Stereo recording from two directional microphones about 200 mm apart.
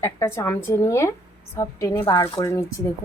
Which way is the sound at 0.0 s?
15° left (ahead or behind).